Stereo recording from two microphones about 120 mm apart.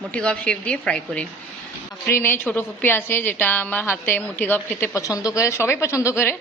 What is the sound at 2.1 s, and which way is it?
Speech, 20° left (ahead or behind).